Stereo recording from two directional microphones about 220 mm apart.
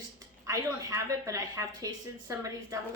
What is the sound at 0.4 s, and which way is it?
A woman's voice, 15° right (ahead or behind).